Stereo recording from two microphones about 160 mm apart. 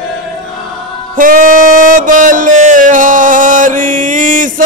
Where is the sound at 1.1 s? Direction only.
55° right (ahead or behind).